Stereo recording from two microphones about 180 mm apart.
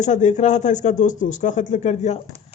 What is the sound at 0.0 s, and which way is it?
Speech, 40° left (ahead or behind).